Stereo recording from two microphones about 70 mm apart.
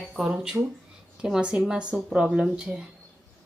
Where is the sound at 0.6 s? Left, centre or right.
Right.